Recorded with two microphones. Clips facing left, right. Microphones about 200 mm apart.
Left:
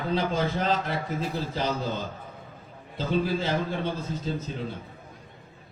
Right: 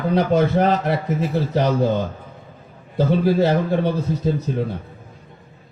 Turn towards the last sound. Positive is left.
turn(degrees=-65)  # may be behind; listen again after turning